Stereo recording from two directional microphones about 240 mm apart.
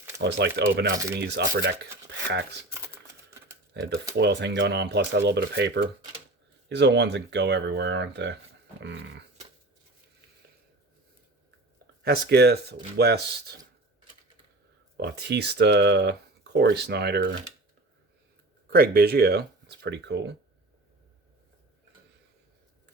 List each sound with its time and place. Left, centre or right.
0.2 s speech: right
2.6 s typing: centre
3.8 s speech: right
12.0 s speech: right
14.9 s speech: right
18.7 s speech: right